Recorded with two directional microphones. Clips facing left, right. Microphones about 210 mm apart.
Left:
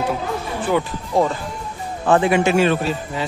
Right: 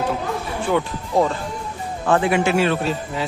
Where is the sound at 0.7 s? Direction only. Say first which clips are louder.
Left 1 dB; centre (ahead or behind).